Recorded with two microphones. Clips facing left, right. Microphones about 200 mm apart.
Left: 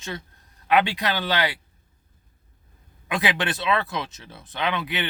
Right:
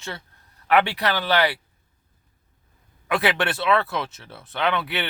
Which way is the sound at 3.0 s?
15° left (ahead or behind).